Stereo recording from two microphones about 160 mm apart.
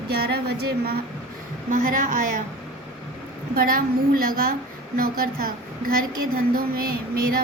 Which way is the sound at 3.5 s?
65° right (ahead or behind).